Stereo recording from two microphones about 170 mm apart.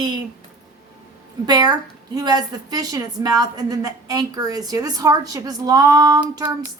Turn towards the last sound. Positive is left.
turn(degrees=-15)  # may be behind; listen again after turning